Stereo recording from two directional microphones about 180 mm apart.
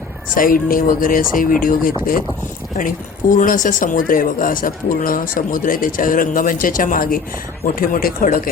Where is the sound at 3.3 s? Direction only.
45° left (ahead or behind).